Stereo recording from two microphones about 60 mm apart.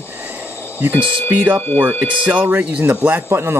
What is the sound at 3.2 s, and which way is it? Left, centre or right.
Speech, right.